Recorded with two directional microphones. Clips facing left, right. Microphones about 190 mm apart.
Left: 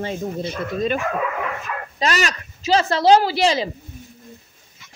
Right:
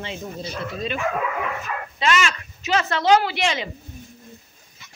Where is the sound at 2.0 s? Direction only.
40° left (ahead or behind).